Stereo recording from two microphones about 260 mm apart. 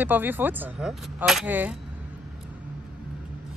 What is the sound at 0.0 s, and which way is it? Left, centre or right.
Speech, centre.